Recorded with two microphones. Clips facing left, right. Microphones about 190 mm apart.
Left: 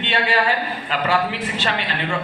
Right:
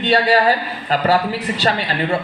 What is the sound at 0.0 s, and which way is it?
Speech, 40° right (ahead or behind).